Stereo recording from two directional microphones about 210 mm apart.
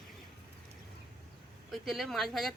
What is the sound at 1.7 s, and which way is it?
Speech, centre (ahead or behind).